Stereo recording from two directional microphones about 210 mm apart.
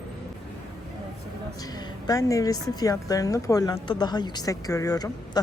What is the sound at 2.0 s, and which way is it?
Speech, 15° left (ahead or behind).